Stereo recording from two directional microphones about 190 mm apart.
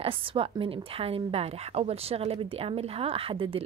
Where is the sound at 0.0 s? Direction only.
25° right (ahead or behind).